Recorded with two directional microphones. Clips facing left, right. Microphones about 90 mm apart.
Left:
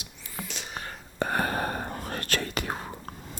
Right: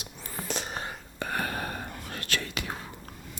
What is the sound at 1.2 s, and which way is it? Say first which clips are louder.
Whispering: left 5 dB; 35° left (ahead or behind).